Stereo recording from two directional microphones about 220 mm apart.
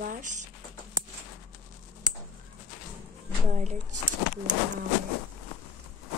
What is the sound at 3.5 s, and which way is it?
Speech, 35° right (ahead or behind).